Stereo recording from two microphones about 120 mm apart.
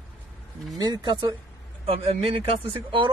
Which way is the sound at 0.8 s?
35° right (ahead or behind).